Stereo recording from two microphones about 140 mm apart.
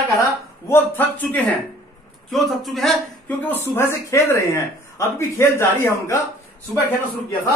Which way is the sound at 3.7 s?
20° left (ahead or behind).